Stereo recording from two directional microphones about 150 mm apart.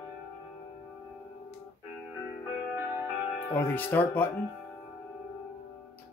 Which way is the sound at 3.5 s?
15° left (ahead or behind).